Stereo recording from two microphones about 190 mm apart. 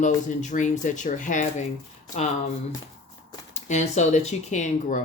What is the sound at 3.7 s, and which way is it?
Speech, 35° left (ahead or behind).